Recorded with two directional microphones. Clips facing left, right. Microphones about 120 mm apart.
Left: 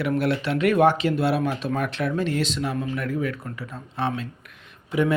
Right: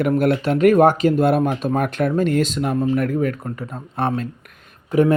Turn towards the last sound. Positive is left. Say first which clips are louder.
# right 6 dB
turn(degrees=-40)  # may be behind; listen again after turning